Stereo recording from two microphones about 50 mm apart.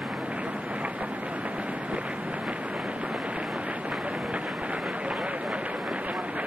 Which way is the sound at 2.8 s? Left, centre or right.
Right.